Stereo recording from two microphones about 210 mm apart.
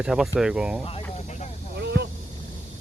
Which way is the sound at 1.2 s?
35° left (ahead or behind).